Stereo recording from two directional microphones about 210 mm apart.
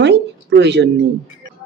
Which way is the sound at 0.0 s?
55° right (ahead or behind).